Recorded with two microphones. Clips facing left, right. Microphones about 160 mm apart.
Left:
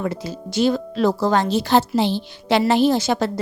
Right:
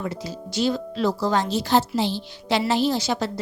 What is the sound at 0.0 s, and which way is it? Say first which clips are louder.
A woman's voice: left 4 dB; 55° left (ahead or behind).